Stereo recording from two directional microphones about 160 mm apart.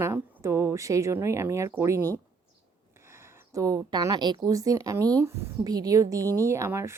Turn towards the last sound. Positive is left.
turn(degrees=-15)  # may be behind; listen again after turning